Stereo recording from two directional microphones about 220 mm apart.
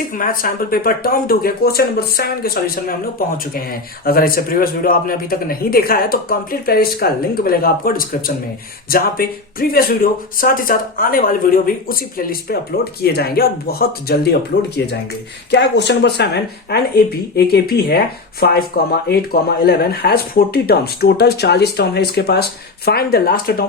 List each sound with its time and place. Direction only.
0.1 s speech: 40° left (ahead or behind)
15.4 s speech: 50° left (ahead or behind)